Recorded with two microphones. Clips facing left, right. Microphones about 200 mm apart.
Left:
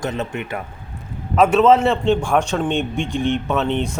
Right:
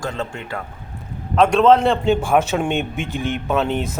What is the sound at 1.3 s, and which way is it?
Speech, 5° left (ahead or behind).